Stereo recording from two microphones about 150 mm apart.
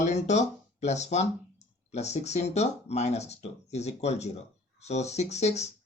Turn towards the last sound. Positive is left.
turn(degrees=45)  # may be behind; listen again after turning